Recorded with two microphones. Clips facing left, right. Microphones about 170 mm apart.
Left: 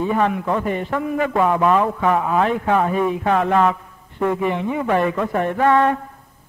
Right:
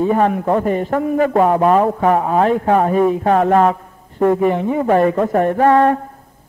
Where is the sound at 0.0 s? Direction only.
40° right (ahead or behind).